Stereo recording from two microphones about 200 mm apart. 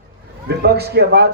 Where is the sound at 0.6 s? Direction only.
50° right (ahead or behind).